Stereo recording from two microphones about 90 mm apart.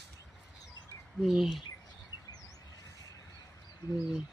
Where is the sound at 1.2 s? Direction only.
5° right (ahead or behind).